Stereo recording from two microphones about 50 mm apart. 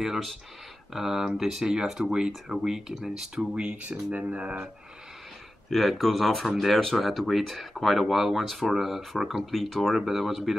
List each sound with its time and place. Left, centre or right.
0.9 s speech: centre
3.3 s speech: right
5.7 s speech: centre